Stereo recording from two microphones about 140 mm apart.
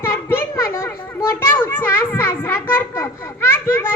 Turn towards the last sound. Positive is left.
turn(degrees=15)  # may be behind; listen again after turning